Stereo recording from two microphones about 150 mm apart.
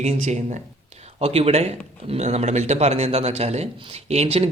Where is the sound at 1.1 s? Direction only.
40° right (ahead or behind).